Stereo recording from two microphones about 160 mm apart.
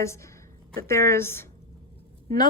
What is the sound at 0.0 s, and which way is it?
A woman's voice, 15° left (ahead or behind).